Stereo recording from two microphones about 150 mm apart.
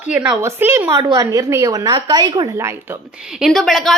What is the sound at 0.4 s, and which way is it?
A woman's voice, 15° right (ahead or behind).